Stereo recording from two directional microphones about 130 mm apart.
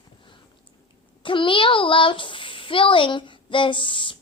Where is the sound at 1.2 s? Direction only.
40° left (ahead or behind).